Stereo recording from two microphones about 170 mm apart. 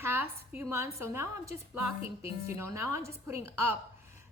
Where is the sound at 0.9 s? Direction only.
15° right (ahead or behind).